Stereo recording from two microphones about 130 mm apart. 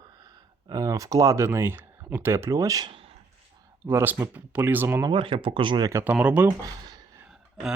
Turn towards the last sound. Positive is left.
turn(degrees=-5)  # may be behind; listen again after turning